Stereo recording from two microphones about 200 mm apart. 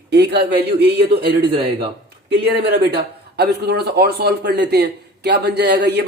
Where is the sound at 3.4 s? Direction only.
55° right (ahead or behind).